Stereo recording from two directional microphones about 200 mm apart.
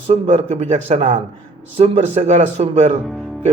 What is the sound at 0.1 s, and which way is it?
A man's voice, 30° right (ahead or behind).